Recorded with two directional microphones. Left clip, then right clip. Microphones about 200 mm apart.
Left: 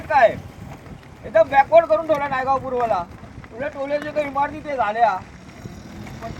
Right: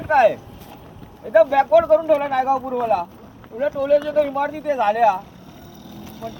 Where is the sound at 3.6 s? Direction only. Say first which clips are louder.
Right 7 dB; 50° right (ahead or behind).